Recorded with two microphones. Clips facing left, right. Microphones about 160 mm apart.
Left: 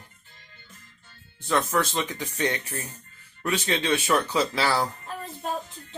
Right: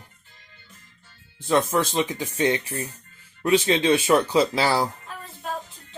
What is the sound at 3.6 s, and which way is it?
Speech, 25° right (ahead or behind).